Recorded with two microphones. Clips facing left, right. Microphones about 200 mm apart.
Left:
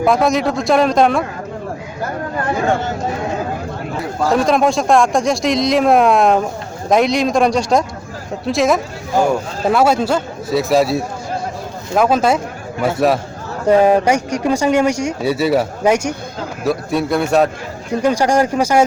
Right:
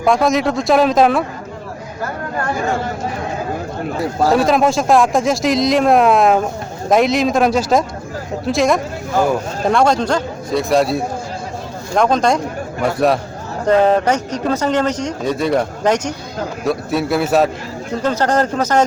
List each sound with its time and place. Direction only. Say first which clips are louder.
0.0 s speech: even; centre (ahead or behind)
4.3 s speech: even; 5° right (ahead or behind)
16.6 s speech: left 1 dB; centre (ahead or behind)
18.0 s speech: left 2 dB; 10° left (ahead or behind)